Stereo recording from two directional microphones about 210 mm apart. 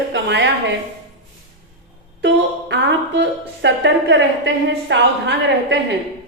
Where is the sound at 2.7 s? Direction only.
55° right (ahead or behind).